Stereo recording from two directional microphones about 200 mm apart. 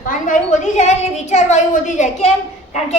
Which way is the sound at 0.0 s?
40° left (ahead or behind).